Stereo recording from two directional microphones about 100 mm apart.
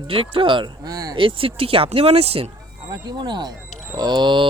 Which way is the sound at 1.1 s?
60° right (ahead or behind).